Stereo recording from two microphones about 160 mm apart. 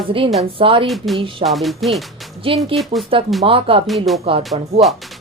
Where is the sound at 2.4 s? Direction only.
35° right (ahead or behind).